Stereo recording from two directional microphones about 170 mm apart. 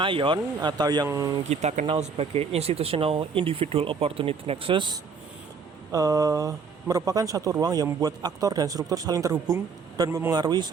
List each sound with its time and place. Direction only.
0.0 s speech: 30° right (ahead or behind)
1.5 s speech: 45° right (ahead or behind); by 10.7 s 25° right (ahead or behind)